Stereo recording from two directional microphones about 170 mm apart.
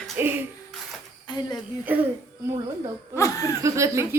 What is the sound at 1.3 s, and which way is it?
Speech, 25° left (ahead or behind).